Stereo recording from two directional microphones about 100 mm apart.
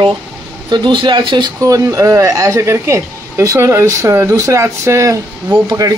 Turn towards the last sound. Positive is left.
turn(degrees=-35)  # may be behind; listen again after turning